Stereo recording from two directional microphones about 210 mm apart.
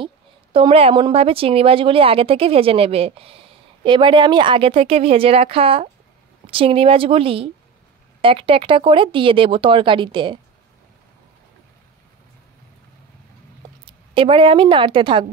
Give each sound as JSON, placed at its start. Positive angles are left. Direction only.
{"t": 0.0, "sound": "a woman's voice", "side_deg": -25}
{"t": 13.8, "sound": "speech", "side_deg": -25}